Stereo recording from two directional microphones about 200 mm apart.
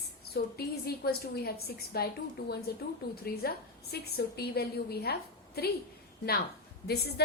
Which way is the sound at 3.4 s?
50° left (ahead or behind).